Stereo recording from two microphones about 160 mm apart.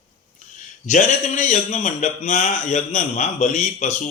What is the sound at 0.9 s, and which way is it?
Speech, 50° left (ahead or behind).